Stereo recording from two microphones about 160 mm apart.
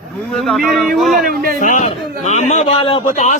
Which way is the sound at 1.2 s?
60° right (ahead or behind).